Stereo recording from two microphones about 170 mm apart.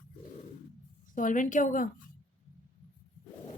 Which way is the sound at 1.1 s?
50° left (ahead or behind).